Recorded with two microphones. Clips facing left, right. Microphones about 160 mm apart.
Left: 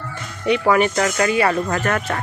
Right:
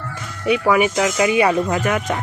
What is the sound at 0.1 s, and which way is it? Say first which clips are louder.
Speech: even; 5° right (ahead or behind).